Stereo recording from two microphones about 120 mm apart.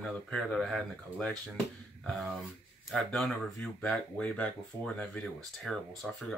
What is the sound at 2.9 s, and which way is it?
Speech, centre (ahead or behind).